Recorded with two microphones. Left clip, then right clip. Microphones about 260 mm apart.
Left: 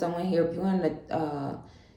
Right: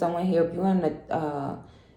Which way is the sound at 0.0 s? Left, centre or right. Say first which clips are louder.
Right 3 dB; right.